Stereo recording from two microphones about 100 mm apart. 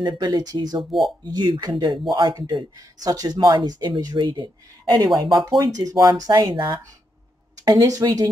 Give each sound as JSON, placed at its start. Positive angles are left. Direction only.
{"t": 0.0, "sound": "speech", "side_deg": -45}